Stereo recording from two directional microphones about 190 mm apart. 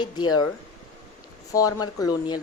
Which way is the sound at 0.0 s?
25° left (ahead or behind).